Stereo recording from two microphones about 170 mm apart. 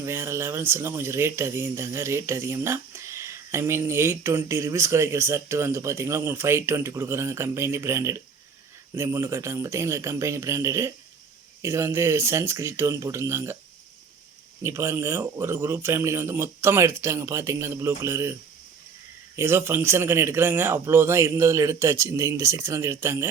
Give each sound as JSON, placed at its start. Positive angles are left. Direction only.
{"t": 0.0, "sound": "speech", "side_deg": -15}
{"t": 14.6, "sound": "speech", "side_deg": -15}
{"t": 19.4, "sound": "speech", "side_deg": -15}